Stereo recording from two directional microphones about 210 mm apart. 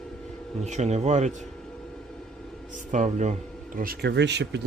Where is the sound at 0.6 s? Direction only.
30° right (ahead or behind).